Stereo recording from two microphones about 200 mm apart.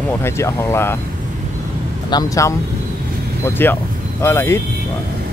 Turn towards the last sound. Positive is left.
turn(degrees=10)  # may be behind; listen again after turning